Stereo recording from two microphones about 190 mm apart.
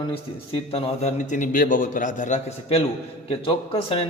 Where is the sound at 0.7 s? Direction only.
35° left (ahead or behind).